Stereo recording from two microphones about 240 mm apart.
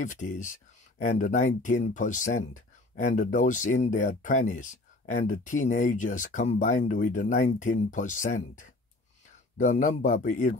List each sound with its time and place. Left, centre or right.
0.0 s speech: left